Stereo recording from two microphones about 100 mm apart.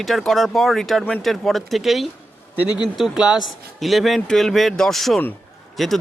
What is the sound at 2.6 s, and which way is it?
Speech, 50° left (ahead or behind).